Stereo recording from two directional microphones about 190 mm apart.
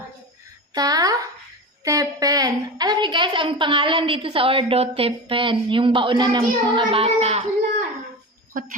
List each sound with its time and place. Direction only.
0.7 s a woman's voice: 20° right (ahead or behind)